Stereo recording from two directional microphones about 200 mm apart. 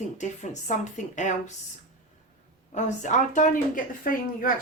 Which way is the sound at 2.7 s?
40° left (ahead or behind).